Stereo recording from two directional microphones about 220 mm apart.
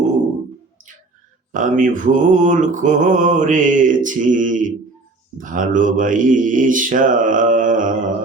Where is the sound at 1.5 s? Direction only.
35° right (ahead or behind).